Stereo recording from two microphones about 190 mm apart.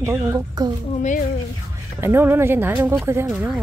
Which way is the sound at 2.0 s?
10° right (ahead or behind).